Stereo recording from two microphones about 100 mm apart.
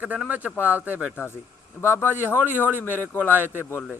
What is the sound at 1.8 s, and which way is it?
Speech, 25° left (ahead or behind).